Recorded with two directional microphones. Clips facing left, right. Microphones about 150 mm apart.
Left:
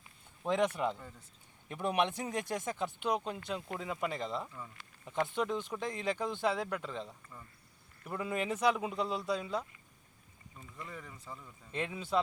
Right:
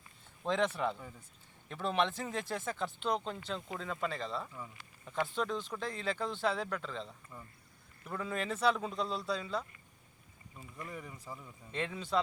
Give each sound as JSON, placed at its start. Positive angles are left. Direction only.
{"t": 0.4, "sound": "speech", "side_deg": 10}
{"t": 4.5, "sound": "speech", "side_deg": -5}
{"t": 5.2, "sound": "speech", "side_deg": 15}
{"t": 7.3, "sound": "speech", "side_deg": -15}
{"t": 8.0, "sound": "speech", "side_deg": 10}
{"t": 10.8, "sound": "speech", "side_deg": -15}
{"t": 11.7, "sound": "speech", "side_deg": 10}